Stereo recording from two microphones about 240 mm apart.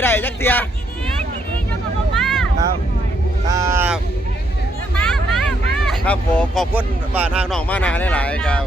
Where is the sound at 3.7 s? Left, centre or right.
Centre.